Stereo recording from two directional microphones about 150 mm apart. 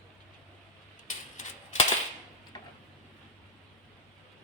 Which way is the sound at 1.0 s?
55° left (ahead or behind).